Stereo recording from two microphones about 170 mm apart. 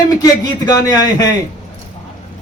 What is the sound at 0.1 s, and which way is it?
Speech, 20° left (ahead or behind).